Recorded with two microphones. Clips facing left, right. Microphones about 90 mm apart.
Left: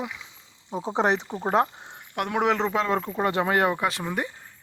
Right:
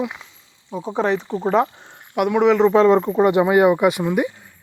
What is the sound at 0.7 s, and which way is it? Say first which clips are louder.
Speech: right 3 dB; 25° left (ahead or behind).